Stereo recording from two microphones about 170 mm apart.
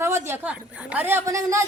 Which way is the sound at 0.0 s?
15° right (ahead or behind).